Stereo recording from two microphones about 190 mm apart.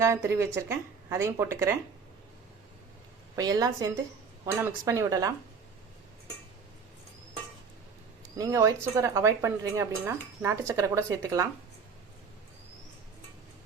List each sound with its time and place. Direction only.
0.0 s speech: 15° right (ahead or behind)
3.3 s a woman's voice: 20° right (ahead or behind)
8.4 s speech: 15° right (ahead or behind)